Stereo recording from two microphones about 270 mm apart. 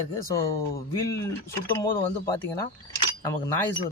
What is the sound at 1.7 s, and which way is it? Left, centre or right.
Speech, centre.